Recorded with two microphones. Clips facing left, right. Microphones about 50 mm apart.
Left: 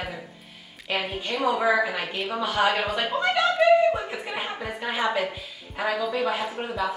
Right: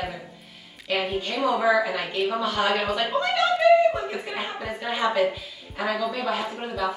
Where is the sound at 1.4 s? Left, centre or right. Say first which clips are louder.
Right 1 dB; centre.